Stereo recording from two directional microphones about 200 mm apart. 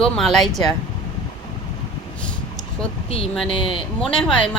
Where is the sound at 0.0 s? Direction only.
Centre (ahead or behind).